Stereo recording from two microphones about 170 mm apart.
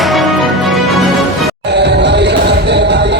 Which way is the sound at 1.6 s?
90° right.